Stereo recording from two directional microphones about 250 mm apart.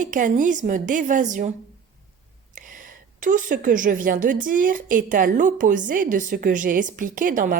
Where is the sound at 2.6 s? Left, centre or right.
Right.